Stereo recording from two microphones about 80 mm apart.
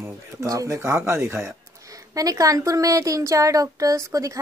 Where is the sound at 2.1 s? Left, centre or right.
Right.